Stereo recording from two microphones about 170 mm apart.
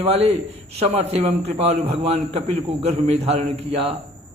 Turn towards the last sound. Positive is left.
turn(degrees=-35)  # may be behind; listen again after turning